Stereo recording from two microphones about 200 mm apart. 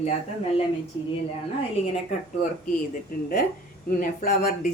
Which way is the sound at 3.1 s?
45° left (ahead or behind).